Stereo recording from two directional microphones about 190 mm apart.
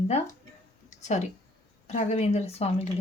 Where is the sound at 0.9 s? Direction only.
40° left (ahead or behind).